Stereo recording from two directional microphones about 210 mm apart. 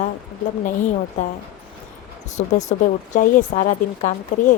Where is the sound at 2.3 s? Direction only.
35° left (ahead or behind).